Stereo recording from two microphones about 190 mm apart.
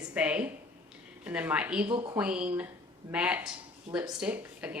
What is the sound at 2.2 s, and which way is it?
A woman's voice, 5° right (ahead or behind).